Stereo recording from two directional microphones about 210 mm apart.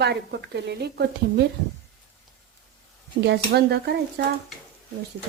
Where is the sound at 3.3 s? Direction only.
50° right (ahead or behind).